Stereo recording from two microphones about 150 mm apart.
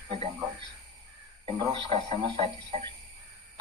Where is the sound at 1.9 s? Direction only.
45° right (ahead or behind).